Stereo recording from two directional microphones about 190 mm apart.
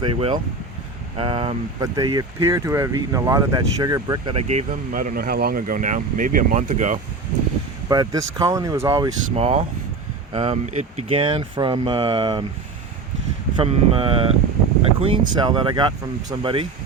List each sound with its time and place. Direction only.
0.0 s speech: 30° right (ahead or behind)
4.4 s speech: 35° right (ahead or behind)
7.9 s speech: 20° right (ahead or behind)
9.3 s speech: 35° right (ahead or behind)
13.6 s speech: 30° right (ahead or behind)